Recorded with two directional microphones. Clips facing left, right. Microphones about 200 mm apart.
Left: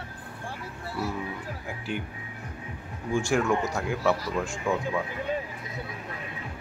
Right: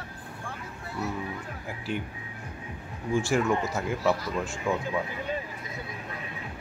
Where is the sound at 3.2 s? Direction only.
Centre (ahead or behind).